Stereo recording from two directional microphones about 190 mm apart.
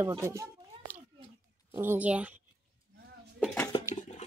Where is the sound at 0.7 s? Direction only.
30° right (ahead or behind).